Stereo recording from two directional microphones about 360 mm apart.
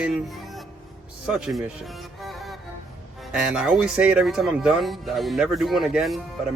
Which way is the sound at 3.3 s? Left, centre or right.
Centre.